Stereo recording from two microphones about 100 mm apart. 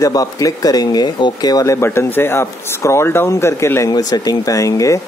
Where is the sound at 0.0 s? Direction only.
35° left (ahead or behind).